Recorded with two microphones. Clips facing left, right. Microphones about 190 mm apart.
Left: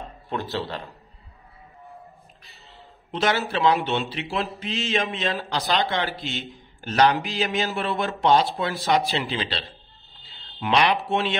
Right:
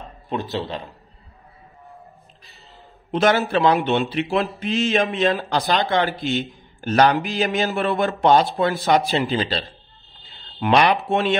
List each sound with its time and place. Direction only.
0.3 s a man's voice: 20° right (ahead or behind)
3.1 s a man's voice: 55° right (ahead or behind)